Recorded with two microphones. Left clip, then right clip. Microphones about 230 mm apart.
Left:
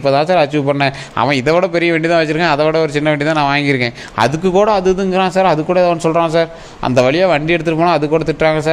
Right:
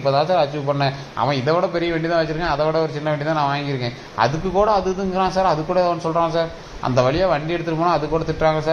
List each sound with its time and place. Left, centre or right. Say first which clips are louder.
0.0 s a man's voice: left 5 dB; left